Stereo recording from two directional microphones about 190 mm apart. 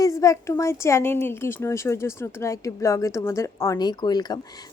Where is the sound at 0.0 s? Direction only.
15° left (ahead or behind).